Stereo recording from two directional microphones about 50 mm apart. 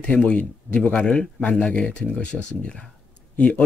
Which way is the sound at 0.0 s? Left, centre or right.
Left.